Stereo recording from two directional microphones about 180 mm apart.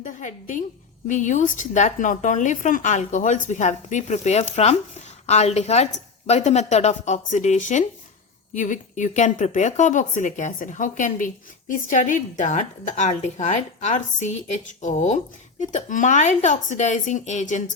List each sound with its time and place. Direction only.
0.0 s a woman's voice: 45° left (ahead or behind)